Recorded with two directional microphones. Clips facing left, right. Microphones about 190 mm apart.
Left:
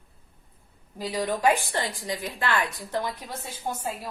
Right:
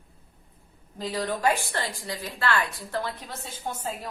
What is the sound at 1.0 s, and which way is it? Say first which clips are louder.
A woman's voice: left 2 dB; 15° left (ahead or behind).